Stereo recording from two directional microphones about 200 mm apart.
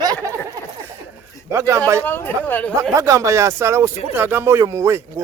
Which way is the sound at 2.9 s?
15° right (ahead or behind).